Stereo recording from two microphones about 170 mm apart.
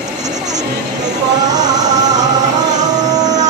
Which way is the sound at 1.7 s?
20° right (ahead or behind).